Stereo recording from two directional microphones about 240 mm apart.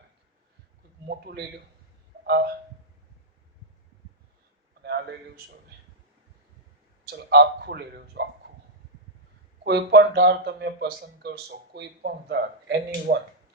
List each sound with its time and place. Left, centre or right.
1.0 s speech: right
4.8 s a sound: right
7.1 s speech: right
9.6 s speech: right